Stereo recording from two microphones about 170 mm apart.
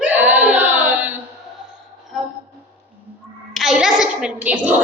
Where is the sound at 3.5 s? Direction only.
Centre (ahead or behind).